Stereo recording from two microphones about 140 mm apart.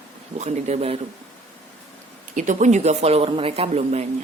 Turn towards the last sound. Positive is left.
turn(degrees=-50)  # may be behind; listen again after turning